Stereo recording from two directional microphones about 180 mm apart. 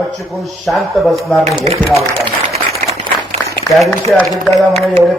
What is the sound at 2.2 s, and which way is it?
Applause, 35° right (ahead or behind).